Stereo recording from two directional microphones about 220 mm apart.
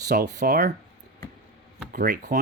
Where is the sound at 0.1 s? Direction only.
45° right (ahead or behind).